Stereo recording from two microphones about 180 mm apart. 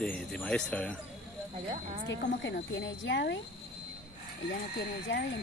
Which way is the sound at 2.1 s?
85° left.